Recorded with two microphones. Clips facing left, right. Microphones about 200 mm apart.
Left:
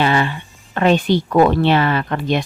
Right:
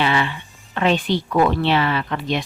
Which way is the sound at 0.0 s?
45° left (ahead or behind).